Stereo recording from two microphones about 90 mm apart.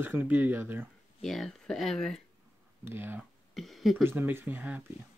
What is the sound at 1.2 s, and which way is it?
Speech, centre (ahead or behind).